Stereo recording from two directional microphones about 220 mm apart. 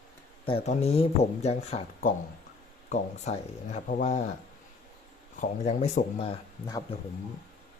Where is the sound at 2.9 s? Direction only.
35° left (ahead or behind).